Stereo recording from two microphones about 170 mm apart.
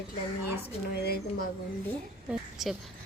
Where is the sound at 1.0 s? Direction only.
65° left (ahead or behind).